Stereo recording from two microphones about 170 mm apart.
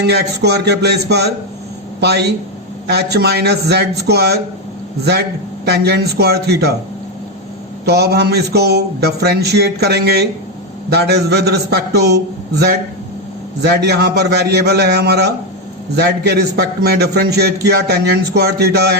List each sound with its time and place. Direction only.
0.0 s a man's voice: 75° right (ahead or behind)
5.6 s a man's voice: 70° right (ahead or behind)
7.9 s a man's voice: 70° right (ahead or behind)